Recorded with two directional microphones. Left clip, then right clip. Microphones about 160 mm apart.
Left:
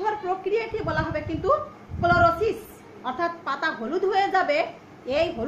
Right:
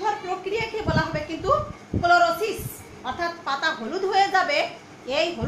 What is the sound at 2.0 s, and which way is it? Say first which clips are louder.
A woman's voice: right 1 dB; 50° left (ahead or behind).